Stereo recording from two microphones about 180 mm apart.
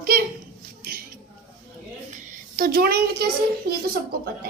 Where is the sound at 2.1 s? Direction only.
45° right (ahead or behind).